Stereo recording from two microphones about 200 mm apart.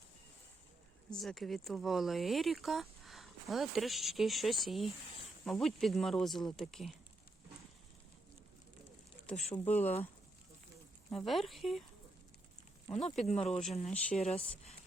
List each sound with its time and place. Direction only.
1.1 s speech: centre (ahead or behind)
9.5 s speech: 10° left (ahead or behind)
9.8 s speech: 30° left (ahead or behind)
11.1 s speech: centre (ahead or behind)
12.9 s speech: 30° left (ahead or behind)
13.5 s speech: 5° left (ahead or behind)
14.3 s speech: 30° left (ahead or behind)